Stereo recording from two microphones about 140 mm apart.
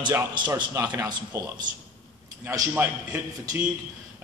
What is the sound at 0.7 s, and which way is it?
A man's voice, 25° right (ahead or behind).